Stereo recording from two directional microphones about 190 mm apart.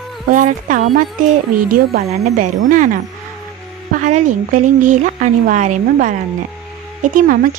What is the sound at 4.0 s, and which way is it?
Speech, 40° right (ahead or behind).